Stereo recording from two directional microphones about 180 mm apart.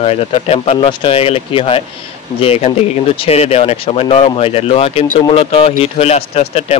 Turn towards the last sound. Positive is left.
turn(degrees=35)  # may be behind; listen again after turning